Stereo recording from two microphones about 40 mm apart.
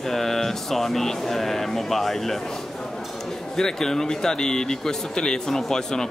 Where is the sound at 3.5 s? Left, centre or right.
Centre.